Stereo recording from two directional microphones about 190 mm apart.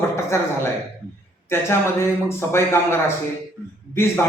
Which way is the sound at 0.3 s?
15° left (ahead or behind).